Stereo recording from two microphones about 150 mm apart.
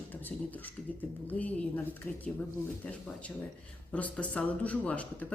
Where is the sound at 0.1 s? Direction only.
10° left (ahead or behind).